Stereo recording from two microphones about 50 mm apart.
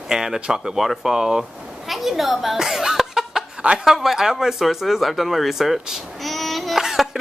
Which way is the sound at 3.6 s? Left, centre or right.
Centre.